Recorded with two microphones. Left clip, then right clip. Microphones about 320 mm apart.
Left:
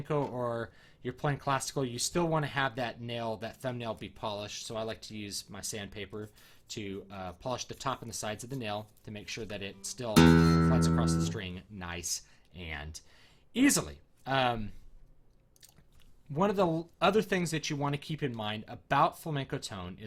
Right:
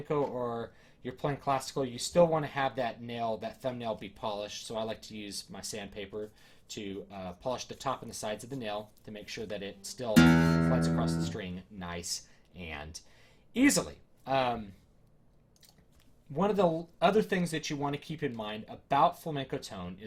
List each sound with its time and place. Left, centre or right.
0.1 s speech: left
16.4 s speech: left